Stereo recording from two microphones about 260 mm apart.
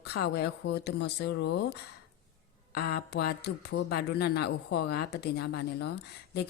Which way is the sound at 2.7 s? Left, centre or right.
Left.